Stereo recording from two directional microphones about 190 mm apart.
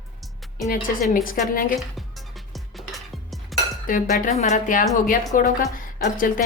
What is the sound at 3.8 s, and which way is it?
Speech, 45° left (ahead or behind).